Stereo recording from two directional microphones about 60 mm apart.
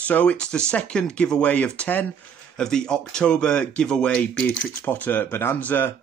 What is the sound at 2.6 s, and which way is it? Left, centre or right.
Speech, centre.